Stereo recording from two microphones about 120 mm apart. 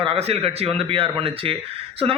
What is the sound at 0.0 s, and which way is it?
A man's voice, 55° right (ahead or behind).